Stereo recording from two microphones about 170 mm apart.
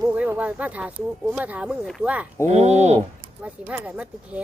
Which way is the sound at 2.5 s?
40° right (ahead or behind).